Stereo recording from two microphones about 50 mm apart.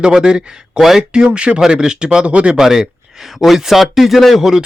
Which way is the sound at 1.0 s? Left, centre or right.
Centre.